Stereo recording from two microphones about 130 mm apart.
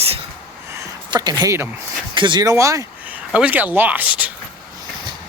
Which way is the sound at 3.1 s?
10° right (ahead or behind).